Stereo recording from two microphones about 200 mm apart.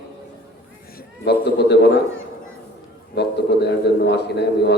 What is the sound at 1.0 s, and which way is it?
A man's voice, 55° left (ahead or behind).